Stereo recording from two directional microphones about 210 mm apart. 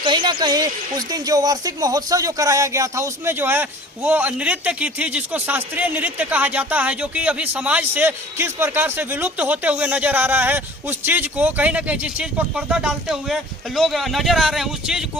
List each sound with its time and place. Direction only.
0.0 s speech: 20° right (ahead or behind); by 15.0 s centre (ahead or behind)